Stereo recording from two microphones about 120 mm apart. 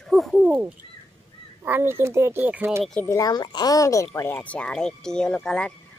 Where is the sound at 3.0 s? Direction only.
30° left (ahead or behind).